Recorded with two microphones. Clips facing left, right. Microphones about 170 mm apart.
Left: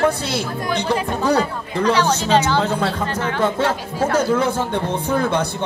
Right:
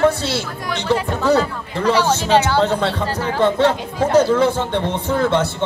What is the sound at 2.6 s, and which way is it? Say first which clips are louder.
Speech: right 2 dB; 30° right (ahead or behind).